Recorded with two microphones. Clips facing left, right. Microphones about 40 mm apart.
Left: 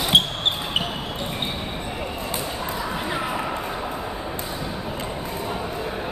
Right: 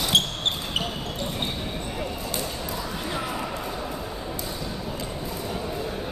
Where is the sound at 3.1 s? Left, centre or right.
Left.